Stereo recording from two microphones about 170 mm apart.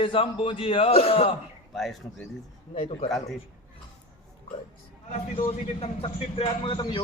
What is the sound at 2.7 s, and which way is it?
Chant, 35° left (ahead or behind).